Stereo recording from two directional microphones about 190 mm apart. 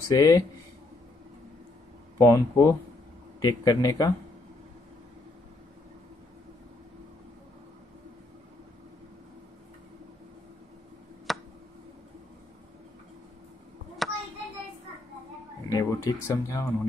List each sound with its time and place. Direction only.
0.1 s speech: 20° left (ahead or behind)
2.1 s a man's voice: 15° left (ahead or behind)
11.3 s tick: centre (ahead or behind)
14.0 s a sound: centre (ahead or behind)
15.7 s speech: 15° left (ahead or behind)